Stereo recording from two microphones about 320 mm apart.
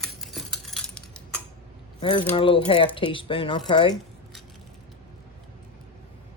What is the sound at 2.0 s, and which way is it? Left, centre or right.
Speech, centre.